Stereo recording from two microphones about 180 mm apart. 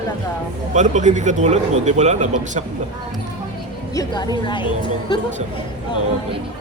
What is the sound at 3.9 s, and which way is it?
A woman's voice, 25° left (ahead or behind).